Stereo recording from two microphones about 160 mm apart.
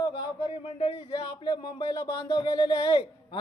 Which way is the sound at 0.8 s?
40° left (ahead or behind).